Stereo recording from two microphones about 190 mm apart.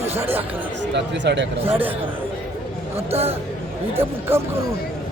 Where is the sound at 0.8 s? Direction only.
70° right (ahead or behind).